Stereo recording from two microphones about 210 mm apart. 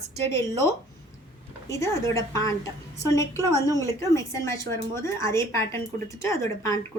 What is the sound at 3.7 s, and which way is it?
A woman's voice, 15° left (ahead or behind).